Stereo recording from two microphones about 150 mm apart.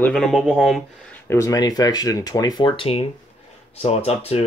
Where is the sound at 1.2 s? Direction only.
20° left (ahead or behind); by 4.4 s 45° left (ahead or behind).